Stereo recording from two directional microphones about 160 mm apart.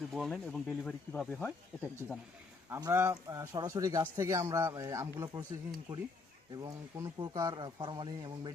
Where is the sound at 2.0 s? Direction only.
10° right (ahead or behind).